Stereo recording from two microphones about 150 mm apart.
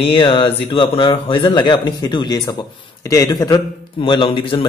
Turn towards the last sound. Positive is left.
turn(degrees=35)  # may be behind; listen again after turning